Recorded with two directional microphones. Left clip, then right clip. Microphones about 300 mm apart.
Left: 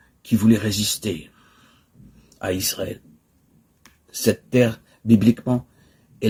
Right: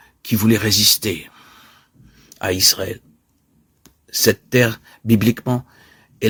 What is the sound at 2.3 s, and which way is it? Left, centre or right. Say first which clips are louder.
Speech: right 8 dB; right.